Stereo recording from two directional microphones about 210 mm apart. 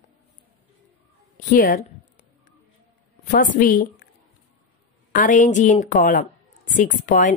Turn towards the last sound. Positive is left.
turn(degrees=40)  # may be behind; listen again after turning